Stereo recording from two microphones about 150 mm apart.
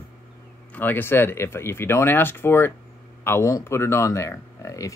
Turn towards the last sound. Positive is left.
turn(degrees=20)  # may be behind; listen again after turning